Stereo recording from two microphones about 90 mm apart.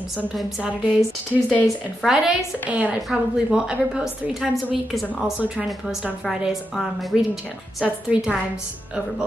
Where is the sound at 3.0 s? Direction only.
5° right (ahead or behind).